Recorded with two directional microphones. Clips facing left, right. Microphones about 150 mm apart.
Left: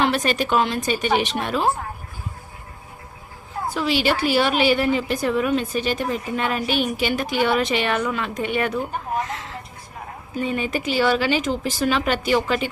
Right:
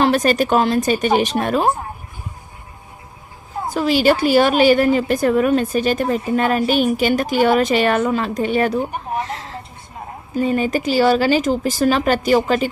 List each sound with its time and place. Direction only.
0.0 s a woman's voice: 40° right (ahead or behind)
3.8 s a woman's voice: 45° right (ahead or behind)
8.8 s speech: 25° right (ahead or behind); by 12.7 s 40° right (ahead or behind)